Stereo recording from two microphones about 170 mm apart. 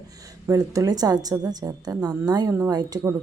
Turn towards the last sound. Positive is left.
turn(degrees=-20)  # may be behind; listen again after turning